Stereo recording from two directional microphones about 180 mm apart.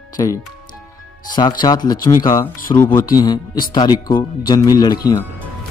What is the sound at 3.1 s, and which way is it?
Speech, 20° left (ahead or behind).